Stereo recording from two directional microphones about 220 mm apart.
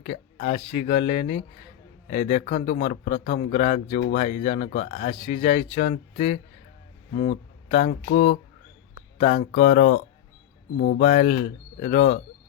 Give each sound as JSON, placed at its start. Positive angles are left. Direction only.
{"t": 0.0, "sound": "a sound", "side_deg": 35}
{"t": 0.5, "sound": "a man's voice", "side_deg": 30}
{"t": 9.1, "sound": "a man's voice", "side_deg": 35}